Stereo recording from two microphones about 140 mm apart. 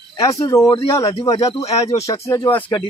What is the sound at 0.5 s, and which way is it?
Speech, 20° left (ahead or behind).